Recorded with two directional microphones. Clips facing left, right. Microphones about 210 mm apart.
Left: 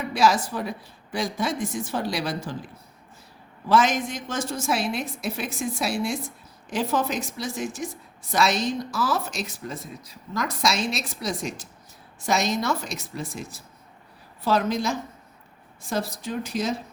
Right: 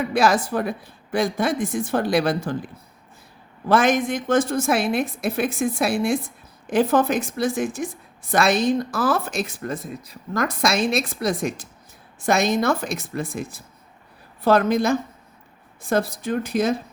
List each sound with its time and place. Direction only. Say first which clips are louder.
0.1 s a woman's voice: even; 55° right (ahead or behind)
3.7 s a woman's voice: right 3 dB; 55° right (ahead or behind)